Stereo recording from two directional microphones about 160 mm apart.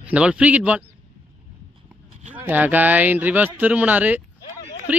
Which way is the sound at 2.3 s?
10° right (ahead or behind).